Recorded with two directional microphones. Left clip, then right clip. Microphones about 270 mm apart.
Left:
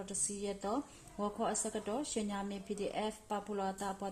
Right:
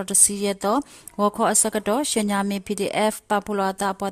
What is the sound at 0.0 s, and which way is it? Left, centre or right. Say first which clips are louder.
Speech: right 17 dB; right.